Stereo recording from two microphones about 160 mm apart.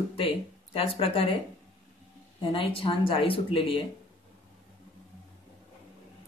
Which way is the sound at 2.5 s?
35° left (ahead or behind).